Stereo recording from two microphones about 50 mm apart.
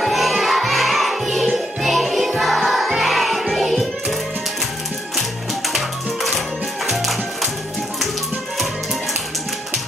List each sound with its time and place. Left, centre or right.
0.0 s music: centre
5.7 s music: centre